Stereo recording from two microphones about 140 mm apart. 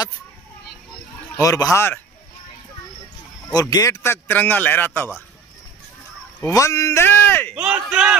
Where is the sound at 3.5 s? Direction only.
25° left (ahead or behind).